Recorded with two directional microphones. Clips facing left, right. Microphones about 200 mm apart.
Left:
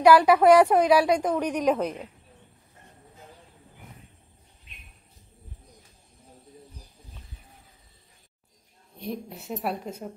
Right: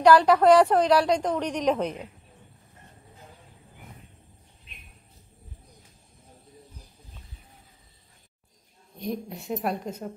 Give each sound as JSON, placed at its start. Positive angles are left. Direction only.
{"t": 0.0, "sound": "a woman's voice", "side_deg": 10}
{"t": 9.0, "sound": "a woman's voice", "side_deg": 0}